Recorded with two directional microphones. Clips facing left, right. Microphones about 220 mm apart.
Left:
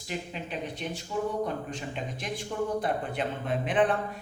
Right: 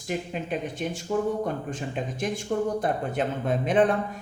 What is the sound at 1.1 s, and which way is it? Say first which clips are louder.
Speech: right 6 dB; 50° right (ahead or behind).